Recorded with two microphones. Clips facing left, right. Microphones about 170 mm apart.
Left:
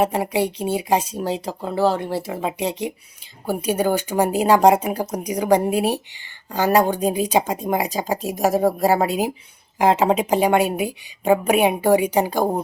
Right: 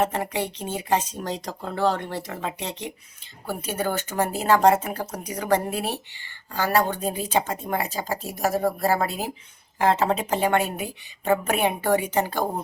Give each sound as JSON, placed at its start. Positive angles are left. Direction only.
{"t": 0.0, "sound": "speech", "side_deg": 10}